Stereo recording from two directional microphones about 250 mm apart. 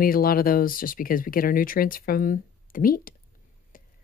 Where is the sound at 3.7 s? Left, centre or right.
Left.